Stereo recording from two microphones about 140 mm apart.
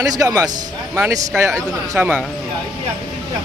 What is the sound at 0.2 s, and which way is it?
Speech, 25° right (ahead or behind).